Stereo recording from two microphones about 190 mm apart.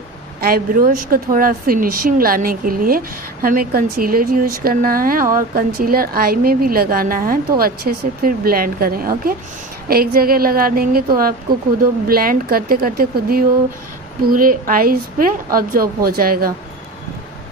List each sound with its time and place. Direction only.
0.4 s a woman's voice: 50° right (ahead or behind)
12.1 s a woman's voice: 50° right (ahead or behind)